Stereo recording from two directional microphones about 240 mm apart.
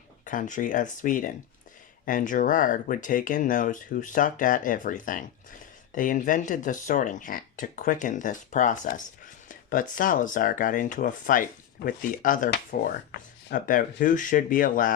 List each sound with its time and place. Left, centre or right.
0.3 s speech: left